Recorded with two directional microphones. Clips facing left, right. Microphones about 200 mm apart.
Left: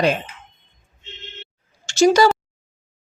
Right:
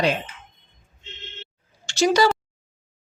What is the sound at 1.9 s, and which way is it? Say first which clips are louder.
Speech: left 4 dB; 45° left (ahead or behind).